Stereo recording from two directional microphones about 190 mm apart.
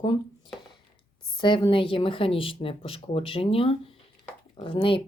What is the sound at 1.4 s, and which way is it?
Speech, 25° left (ahead or behind).